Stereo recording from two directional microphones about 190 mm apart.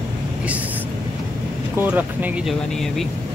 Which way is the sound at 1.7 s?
10° right (ahead or behind).